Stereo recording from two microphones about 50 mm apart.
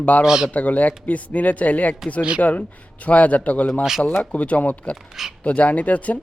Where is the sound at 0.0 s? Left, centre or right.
Left.